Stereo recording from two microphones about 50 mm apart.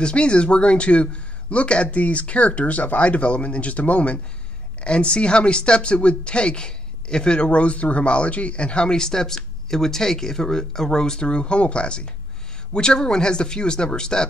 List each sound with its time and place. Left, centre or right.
0.0 s speech: left